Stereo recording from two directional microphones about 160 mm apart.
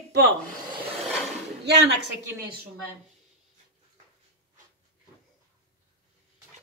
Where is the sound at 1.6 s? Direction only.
90° right.